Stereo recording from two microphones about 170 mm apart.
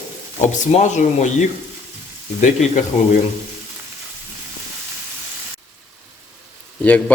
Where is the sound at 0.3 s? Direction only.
45° left (ahead or behind).